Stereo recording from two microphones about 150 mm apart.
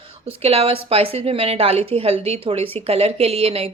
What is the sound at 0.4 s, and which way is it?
A woman's voice, 40° right (ahead or behind).